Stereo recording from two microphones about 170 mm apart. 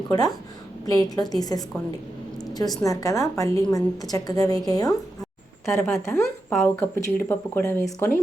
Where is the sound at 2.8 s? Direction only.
20° left (ahead or behind).